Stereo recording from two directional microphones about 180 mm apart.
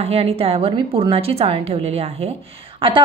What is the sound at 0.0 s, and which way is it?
A woman's voice, 35° right (ahead or behind).